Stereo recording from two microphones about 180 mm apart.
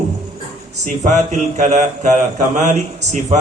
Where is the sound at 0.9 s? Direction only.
40° right (ahead or behind).